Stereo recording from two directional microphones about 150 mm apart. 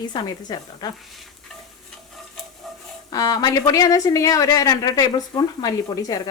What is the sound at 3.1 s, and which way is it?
A woman's voice, 25° left (ahead or behind).